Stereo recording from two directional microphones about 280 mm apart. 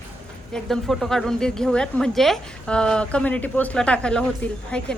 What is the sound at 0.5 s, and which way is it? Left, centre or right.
A woman's voice, centre.